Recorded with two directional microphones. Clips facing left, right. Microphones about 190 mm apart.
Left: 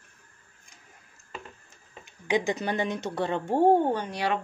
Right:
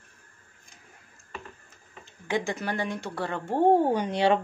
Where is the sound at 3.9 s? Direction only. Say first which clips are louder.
Right 5 dB; 20° right (ahead or behind).